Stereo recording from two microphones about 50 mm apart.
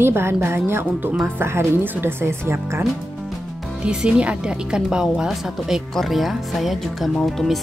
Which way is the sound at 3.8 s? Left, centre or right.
Centre.